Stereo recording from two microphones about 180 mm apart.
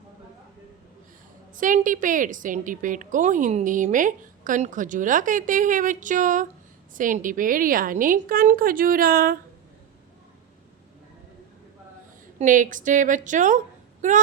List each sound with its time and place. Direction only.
1.5 s a woman's voice: 45° right (ahead or behind)
12.4 s a woman's voice: 45° right (ahead or behind)